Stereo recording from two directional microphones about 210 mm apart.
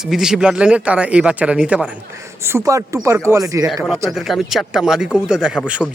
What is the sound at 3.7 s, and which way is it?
Speech, centre (ahead or behind).